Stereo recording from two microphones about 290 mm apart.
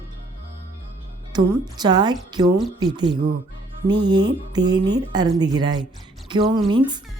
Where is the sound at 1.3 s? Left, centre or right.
Centre.